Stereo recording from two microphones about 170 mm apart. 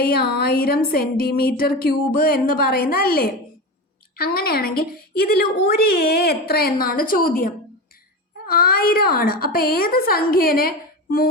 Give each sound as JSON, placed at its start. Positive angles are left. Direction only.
{"t": 0.0, "sound": "a woman's voice", "side_deg": 65}